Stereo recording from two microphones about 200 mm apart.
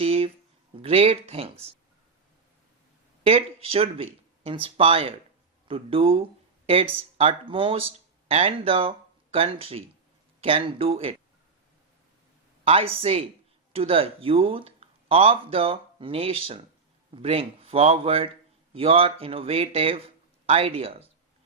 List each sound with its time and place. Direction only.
0.0 s a sound: 30° right (ahead or behind)
0.8 s speech: 30° right (ahead or behind)
3.2 s speech: 30° right (ahead or behind)
12.6 s speech: 30° right (ahead or behind)